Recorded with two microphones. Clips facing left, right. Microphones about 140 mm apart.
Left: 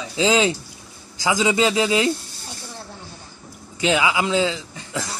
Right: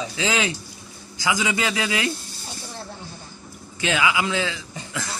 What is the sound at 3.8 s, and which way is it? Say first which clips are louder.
Speech: left 3 dB; 20° left (ahead or behind).